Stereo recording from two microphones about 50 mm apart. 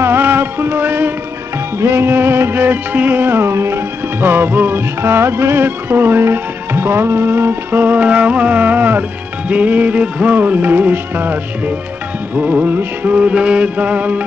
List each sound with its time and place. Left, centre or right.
0.0 s music: right
1.8 s music: right
8.0 s music: right